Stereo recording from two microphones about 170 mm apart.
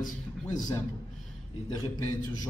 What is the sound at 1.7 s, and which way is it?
Speech, 20° left (ahead or behind).